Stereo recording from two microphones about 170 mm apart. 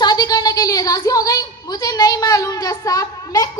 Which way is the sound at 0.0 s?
25° left (ahead or behind).